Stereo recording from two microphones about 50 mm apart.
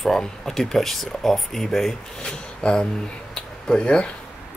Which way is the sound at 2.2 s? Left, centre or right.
Centre.